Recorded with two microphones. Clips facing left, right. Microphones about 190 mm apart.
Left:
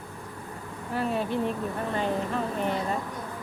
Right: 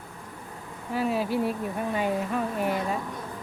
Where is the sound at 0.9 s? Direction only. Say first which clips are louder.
Right 2 dB; 5° right (ahead or behind).